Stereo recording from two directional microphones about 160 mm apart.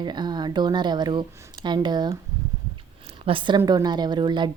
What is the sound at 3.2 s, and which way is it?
A woman's voice, 30° right (ahead or behind).